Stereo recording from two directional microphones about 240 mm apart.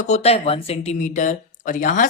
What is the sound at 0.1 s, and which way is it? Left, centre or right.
Speech, left.